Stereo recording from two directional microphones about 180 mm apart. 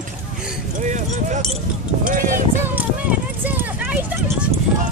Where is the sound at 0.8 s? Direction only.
45° right (ahead or behind).